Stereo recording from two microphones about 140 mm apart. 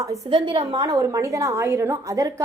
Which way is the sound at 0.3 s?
35° right (ahead or behind).